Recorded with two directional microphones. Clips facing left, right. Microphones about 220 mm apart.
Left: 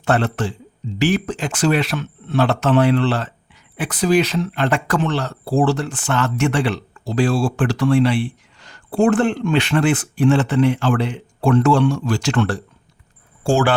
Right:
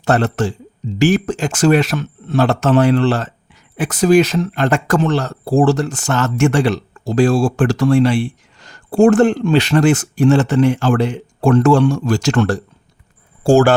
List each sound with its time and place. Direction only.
0.0 s speech: 45° right (ahead or behind)